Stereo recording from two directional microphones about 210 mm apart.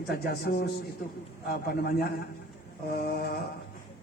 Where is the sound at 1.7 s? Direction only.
50° left (ahead or behind).